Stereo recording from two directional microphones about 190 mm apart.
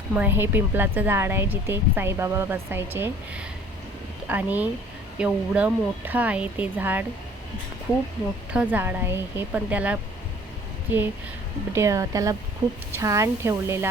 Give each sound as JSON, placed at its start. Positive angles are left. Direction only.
{"t": 0.1, "sound": "speech", "side_deg": -10}
{"t": 8.5, "sound": "speech", "side_deg": -10}